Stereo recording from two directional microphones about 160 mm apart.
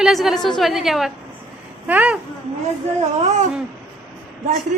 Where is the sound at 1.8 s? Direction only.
10° right (ahead or behind).